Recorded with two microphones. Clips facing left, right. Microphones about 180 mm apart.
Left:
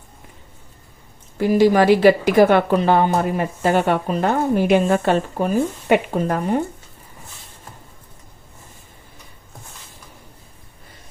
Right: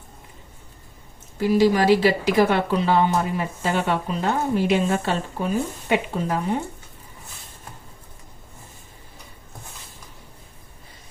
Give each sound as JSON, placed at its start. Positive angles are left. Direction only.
{"t": 1.4, "sound": "a woman's voice", "side_deg": 55}